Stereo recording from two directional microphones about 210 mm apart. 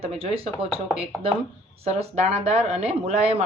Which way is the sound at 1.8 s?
30° right (ahead or behind).